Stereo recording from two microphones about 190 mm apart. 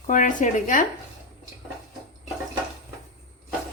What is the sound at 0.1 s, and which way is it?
Speech, 45° left (ahead or behind).